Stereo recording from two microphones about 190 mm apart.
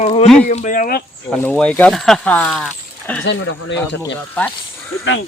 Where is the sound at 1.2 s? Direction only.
10° left (ahead or behind).